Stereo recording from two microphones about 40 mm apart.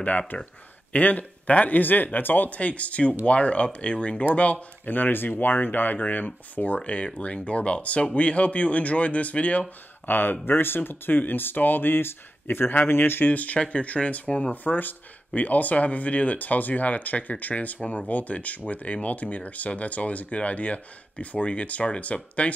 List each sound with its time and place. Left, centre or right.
0.3 s speech: left
2.5 s speech: left
4.9 s speech: left
10.0 s speech: left
13.2 s speech: left
14.5 s speech: left